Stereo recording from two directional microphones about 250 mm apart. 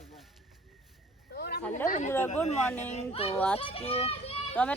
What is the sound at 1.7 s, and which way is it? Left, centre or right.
Speech, left.